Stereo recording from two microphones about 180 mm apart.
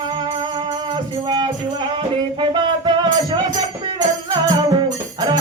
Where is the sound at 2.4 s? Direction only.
25° right (ahead or behind).